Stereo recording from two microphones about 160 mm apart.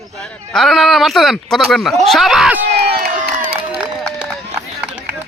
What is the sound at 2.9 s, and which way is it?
Crowd, 80° right.